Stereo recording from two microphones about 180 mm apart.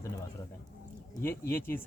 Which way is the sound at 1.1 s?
15° left (ahead or behind).